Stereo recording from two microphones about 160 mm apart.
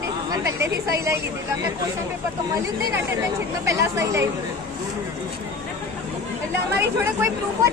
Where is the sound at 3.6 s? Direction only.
20° right (ahead or behind).